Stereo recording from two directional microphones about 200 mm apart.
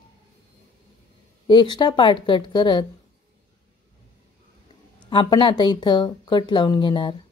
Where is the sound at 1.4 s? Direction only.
20° left (ahead or behind).